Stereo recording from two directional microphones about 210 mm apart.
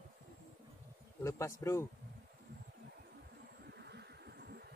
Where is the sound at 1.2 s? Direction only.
15° left (ahead or behind).